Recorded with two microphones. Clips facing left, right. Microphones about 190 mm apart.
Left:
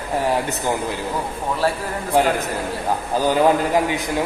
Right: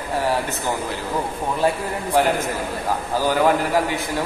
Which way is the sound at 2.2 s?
20° left (ahead or behind).